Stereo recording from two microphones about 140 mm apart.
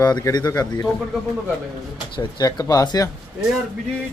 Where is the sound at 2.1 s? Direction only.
25° left (ahead or behind).